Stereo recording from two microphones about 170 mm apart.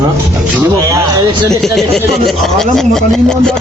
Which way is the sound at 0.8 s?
20° right (ahead or behind).